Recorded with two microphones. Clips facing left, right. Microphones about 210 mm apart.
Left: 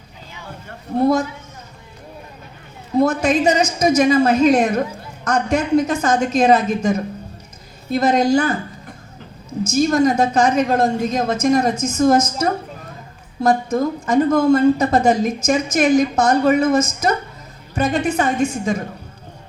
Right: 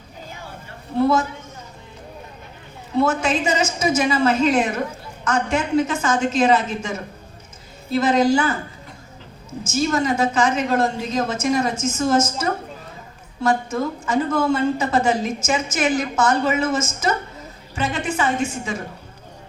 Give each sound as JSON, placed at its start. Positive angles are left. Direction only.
{"t": 0.9, "sound": "a woman's voice", "side_deg": 40}
{"t": 3.0, "sound": "a woman's voice", "side_deg": 40}
{"t": 9.6, "sound": "a woman's voice", "side_deg": 40}